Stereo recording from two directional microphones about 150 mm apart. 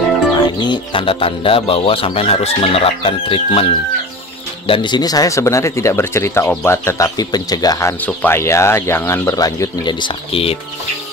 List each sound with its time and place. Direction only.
0.6 s speech: 30° left (ahead or behind)
8.0 s speech: 15° left (ahead or behind); by 10.6 s 40° left (ahead or behind)